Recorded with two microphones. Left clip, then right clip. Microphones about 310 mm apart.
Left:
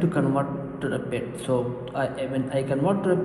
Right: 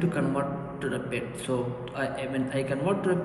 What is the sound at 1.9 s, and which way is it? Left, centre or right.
Speech, centre.